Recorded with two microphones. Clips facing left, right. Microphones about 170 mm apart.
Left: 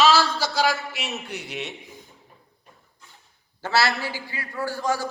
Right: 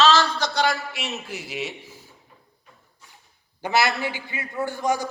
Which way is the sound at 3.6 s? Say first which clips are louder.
Right 1 dB; 15° right (ahead or behind).